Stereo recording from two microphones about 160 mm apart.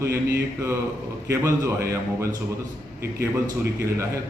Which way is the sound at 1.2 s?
15° right (ahead or behind).